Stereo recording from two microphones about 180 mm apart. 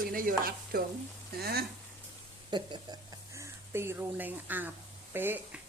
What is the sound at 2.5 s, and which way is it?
A woman's voice, 25° right (ahead or behind).